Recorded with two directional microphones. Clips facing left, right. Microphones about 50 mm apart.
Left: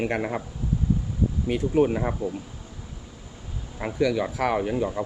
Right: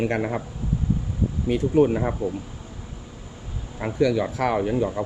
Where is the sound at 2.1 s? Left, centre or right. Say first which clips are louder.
Right 2 dB; right.